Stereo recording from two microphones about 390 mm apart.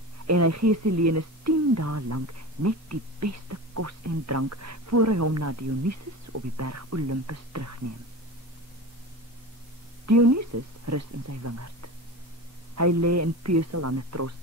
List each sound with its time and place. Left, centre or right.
0.3 s speech: right
10.0 s a woman's voice: right